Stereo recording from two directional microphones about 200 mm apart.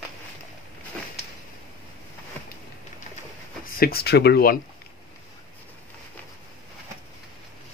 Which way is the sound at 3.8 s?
50° left (ahead or behind).